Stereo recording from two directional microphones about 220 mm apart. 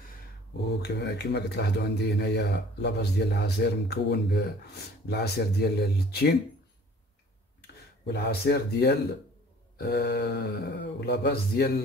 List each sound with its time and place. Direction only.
0.8 s speech: 50° left (ahead or behind)
8.0 s speech: 50° left (ahead or behind)